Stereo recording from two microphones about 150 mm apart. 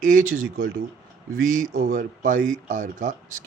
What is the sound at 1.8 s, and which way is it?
Speech, 60° right (ahead or behind).